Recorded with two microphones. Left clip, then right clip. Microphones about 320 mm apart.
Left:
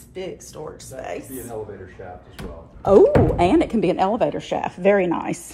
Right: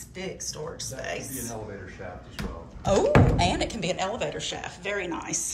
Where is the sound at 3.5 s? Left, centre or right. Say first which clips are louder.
Left 10 dB; centre.